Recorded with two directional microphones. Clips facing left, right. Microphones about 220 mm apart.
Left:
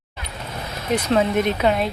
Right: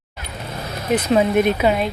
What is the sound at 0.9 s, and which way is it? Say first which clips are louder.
Speech: right 3 dB; 10° right (ahead or behind).